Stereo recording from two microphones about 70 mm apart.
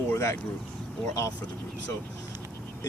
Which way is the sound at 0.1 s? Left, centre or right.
Left.